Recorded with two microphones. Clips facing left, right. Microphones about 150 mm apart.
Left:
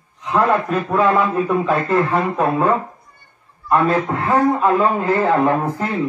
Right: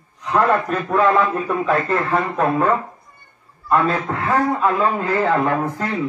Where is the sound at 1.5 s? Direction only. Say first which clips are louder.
Left 2 dB; 20° left (ahead or behind).